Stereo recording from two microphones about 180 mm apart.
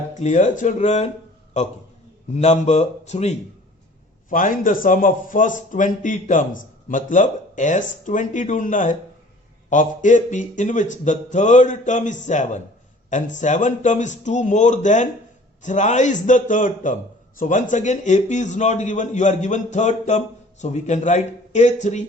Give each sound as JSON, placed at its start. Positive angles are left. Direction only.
{"t": 0.1, "sound": "a man's voice", "side_deg": 40}